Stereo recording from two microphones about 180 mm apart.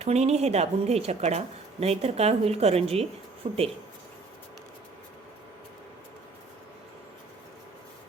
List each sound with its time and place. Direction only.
0.0 s a woman's voice: 35° right (ahead or behind)